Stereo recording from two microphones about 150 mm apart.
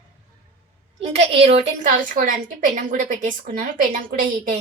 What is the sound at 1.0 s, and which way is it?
Speech, 40° right (ahead or behind).